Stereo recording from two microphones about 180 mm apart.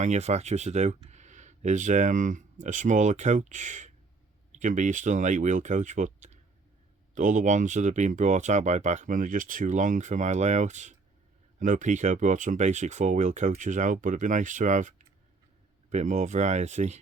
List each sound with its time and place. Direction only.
0.0 s speech: 40° right (ahead or behind)